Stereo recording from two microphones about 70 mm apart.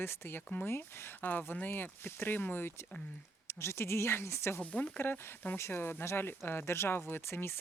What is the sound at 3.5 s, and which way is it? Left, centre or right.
Speech, left.